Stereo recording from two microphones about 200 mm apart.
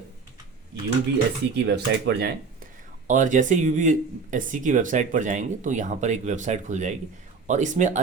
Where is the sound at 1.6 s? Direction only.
55° right (ahead or behind).